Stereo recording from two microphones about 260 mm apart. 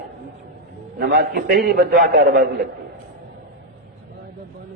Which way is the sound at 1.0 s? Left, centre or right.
Right.